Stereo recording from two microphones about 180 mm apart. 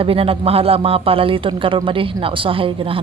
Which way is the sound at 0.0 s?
30° right (ahead or behind).